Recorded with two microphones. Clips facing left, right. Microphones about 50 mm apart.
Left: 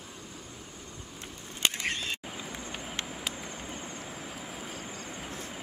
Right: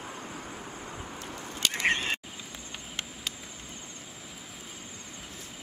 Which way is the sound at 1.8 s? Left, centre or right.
Right.